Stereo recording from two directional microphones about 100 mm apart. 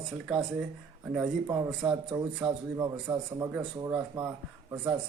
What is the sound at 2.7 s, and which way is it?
Speech, 35° right (ahead or behind).